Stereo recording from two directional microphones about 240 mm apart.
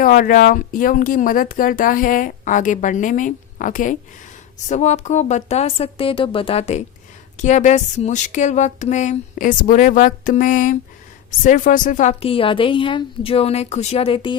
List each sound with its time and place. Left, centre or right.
0.0 s a woman's voice: left